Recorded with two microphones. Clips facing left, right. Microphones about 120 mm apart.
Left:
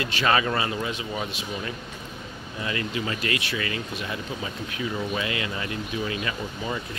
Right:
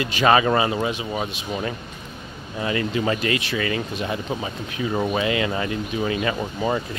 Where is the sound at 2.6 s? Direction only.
35° right (ahead or behind).